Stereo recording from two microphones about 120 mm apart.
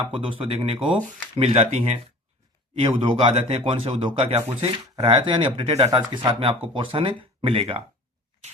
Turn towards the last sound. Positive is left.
turn(degrees=-50)  # may be behind; listen again after turning